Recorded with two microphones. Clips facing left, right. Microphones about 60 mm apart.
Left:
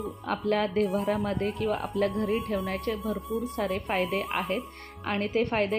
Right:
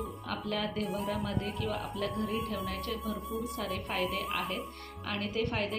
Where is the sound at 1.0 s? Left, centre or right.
Left.